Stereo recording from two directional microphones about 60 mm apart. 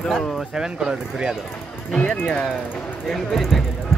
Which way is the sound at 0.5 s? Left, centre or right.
Centre.